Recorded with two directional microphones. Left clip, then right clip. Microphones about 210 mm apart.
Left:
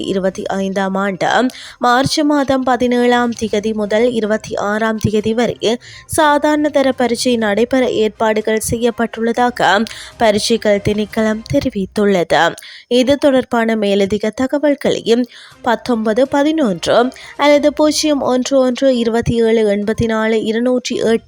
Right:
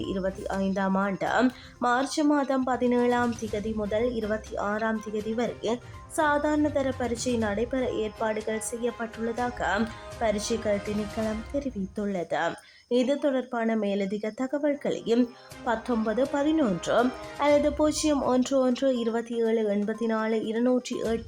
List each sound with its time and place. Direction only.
0.0 s speech: 40° left (ahead or behind)